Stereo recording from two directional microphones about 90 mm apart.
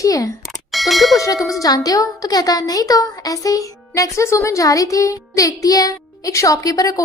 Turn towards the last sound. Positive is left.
turn(degrees=40)  # may be behind; listen again after turning